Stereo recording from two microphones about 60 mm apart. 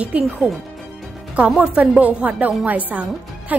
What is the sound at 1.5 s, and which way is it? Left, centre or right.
A woman's voice, centre.